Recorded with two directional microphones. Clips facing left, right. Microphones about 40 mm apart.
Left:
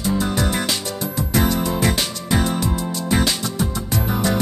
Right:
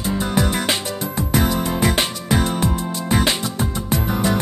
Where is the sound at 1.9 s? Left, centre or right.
Right.